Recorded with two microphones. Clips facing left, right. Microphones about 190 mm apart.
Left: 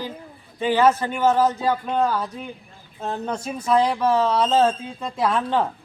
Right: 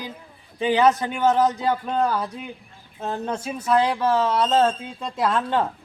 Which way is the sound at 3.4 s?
5° right (ahead or behind).